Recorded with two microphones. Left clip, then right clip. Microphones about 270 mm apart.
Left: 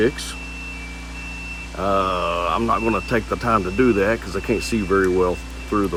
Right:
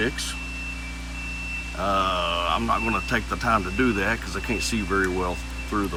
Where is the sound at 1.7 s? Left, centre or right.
Left.